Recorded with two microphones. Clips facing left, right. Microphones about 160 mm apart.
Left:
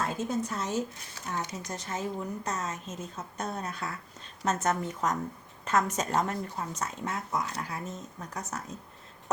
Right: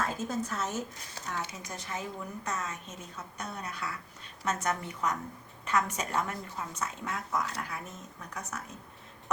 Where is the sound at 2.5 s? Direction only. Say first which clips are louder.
Left 2 dB; 40° left (ahead or behind).